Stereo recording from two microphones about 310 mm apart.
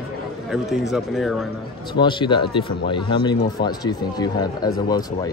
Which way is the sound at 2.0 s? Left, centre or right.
Centre.